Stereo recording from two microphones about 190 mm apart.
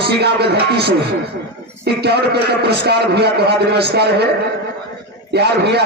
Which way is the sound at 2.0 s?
60° right (ahead or behind).